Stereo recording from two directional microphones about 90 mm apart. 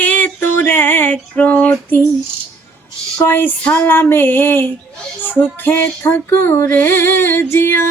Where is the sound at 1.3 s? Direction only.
15° left (ahead or behind).